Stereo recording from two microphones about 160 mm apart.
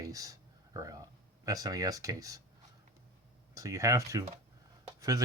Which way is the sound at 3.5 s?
20° right (ahead or behind).